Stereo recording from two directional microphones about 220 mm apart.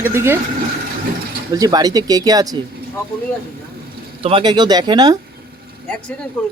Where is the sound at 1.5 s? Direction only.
15° right (ahead or behind).